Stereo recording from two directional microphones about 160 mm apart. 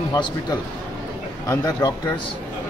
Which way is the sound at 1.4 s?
25° left (ahead or behind).